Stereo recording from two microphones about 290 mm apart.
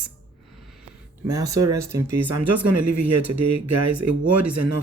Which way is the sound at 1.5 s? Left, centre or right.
Centre.